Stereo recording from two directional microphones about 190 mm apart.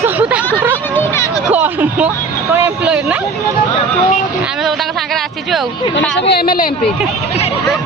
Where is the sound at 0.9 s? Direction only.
15° left (ahead or behind).